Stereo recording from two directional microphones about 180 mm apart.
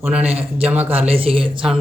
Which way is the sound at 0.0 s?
10° right (ahead or behind).